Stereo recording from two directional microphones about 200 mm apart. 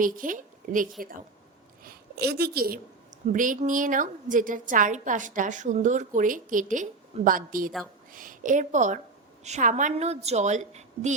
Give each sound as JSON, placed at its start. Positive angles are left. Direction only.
{"t": 0.0, "sound": "a woman's voice", "side_deg": -40}